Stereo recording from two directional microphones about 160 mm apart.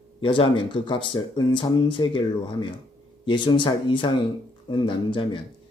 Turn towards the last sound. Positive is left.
turn(degrees=30)  # may be behind; listen again after turning